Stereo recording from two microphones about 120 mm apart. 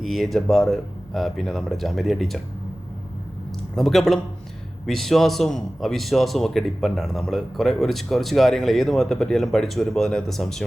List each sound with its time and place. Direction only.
0.0 s a man's voice: centre (ahead or behind)
3.8 s a man's voice: centre (ahead or behind)